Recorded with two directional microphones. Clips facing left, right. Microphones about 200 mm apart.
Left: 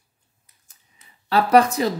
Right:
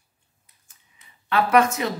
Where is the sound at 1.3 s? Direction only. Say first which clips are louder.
Left 3 dB; 35° left (ahead or behind).